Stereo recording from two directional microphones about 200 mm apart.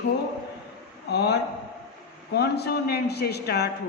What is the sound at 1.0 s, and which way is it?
A man's voice, 55° left (ahead or behind).